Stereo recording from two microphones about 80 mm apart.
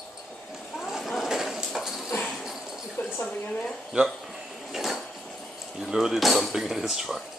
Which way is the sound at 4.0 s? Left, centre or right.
Centre.